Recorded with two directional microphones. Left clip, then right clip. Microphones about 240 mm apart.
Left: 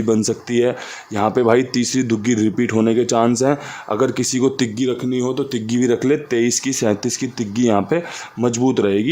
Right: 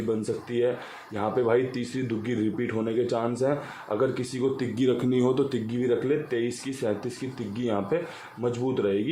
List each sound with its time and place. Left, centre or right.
0.1 s speech: left
4.8 s speech: left
5.6 s speech: left